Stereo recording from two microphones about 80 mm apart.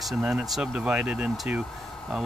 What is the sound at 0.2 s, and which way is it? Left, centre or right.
Speech, centre.